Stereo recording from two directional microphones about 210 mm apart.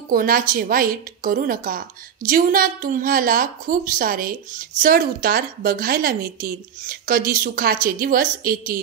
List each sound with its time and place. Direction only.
0.1 s a woman's voice: 40° right (ahead or behind)